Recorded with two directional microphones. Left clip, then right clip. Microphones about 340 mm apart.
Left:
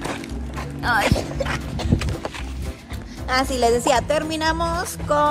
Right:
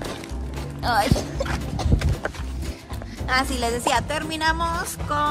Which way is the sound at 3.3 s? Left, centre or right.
Centre.